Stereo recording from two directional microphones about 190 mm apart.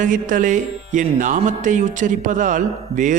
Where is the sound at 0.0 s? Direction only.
45° right (ahead or behind).